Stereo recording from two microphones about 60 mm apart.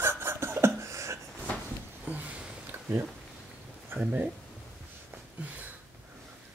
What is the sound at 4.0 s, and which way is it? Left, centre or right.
Speech, right.